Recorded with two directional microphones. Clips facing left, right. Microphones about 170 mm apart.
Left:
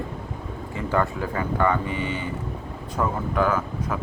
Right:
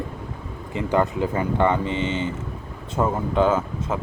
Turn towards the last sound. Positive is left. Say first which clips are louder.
# right 3 dB
turn(degrees=-25)  # may be behind; listen again after turning